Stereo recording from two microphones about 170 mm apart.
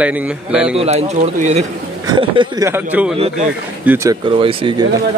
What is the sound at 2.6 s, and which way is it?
Speech, 10° right (ahead or behind).